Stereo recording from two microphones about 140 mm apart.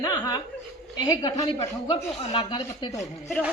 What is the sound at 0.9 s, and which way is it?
A woman's voice, 30° left (ahead or behind).